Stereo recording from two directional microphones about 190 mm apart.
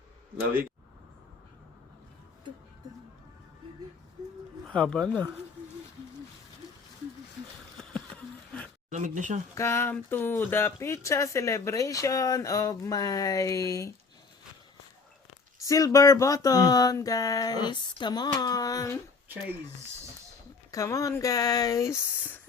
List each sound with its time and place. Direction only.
4.6 s speech: 5° left (ahead or behind)
7.8 s a sound: 5° left (ahead or behind)
8.9 s speech: 40° right (ahead or behind)
9.6 s speech: 15° left (ahead or behind)
15.6 s speech: 15° left (ahead or behind)
18.3 s a sound: 20° left (ahead or behind)
20.7 s speech: 15° left (ahead or behind)